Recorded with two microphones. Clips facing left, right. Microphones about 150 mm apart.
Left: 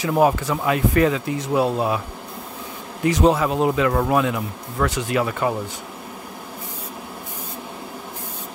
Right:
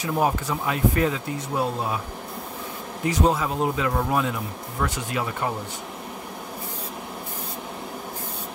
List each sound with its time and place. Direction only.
0.0 s speech: 90° left
3.1 s speech: 85° left
4.8 s speech: 90° left